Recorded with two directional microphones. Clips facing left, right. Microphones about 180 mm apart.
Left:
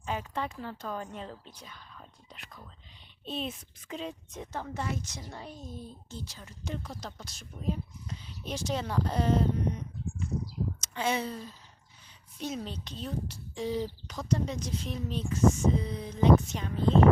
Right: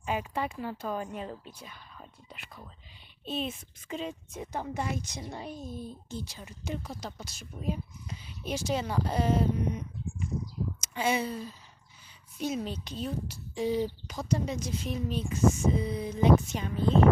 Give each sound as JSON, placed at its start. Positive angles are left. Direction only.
{"t": 0.0, "sound": "a woman's voice", "side_deg": -10}